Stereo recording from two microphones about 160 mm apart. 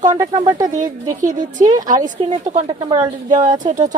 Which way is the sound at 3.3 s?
50° right (ahead or behind).